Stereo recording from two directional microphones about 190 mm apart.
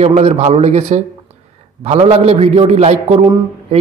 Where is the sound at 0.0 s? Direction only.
35° right (ahead or behind).